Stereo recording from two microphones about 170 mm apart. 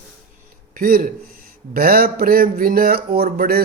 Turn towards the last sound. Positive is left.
turn(degrees=-65)  # may be behind; listen again after turning